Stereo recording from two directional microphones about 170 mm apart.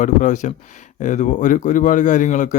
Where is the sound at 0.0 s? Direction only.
50° left (ahead or behind).